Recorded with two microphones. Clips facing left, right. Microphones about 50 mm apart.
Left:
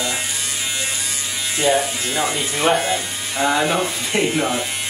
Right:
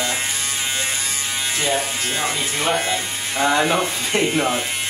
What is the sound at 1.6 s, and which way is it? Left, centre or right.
Speech, left.